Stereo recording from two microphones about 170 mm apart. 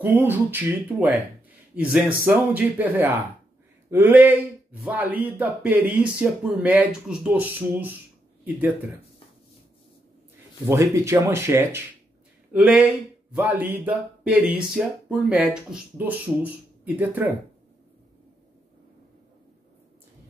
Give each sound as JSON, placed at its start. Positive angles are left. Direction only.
{"t": 0.0, "sound": "speech", "side_deg": -10}
{"t": 10.7, "sound": "speech", "side_deg": -15}